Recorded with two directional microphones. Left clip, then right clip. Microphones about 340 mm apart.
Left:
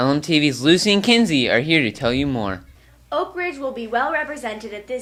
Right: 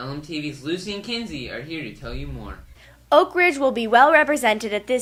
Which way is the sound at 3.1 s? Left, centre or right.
Right.